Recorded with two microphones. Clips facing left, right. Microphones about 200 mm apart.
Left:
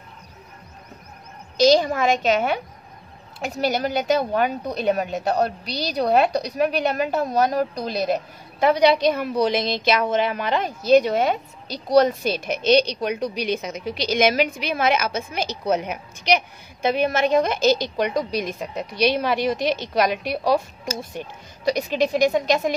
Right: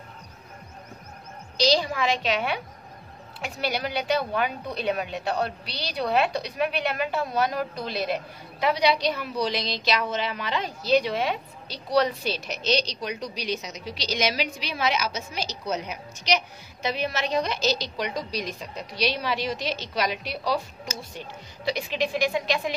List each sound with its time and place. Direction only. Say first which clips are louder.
1.6 s a woman's voice: left 7 dB; 50° left (ahead or behind)